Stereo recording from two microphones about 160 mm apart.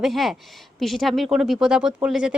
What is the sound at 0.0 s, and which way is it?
A woman's voice, centre (ahead or behind).